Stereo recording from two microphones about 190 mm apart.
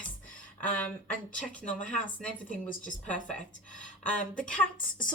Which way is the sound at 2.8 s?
5° left (ahead or behind).